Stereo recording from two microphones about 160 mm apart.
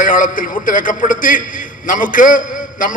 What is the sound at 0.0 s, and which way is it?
A man's voice, 60° left (ahead or behind).